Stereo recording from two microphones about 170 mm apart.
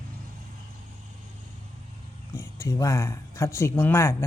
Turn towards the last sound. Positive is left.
turn(degrees=15)  # may be behind; listen again after turning